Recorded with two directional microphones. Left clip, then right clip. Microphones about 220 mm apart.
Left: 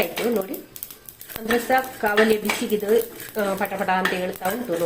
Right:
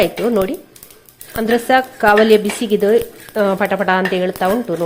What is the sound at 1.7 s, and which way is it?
Speech, 50° right (ahead or behind).